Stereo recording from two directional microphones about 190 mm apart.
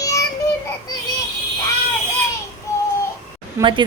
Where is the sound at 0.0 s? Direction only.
15° left (ahead or behind).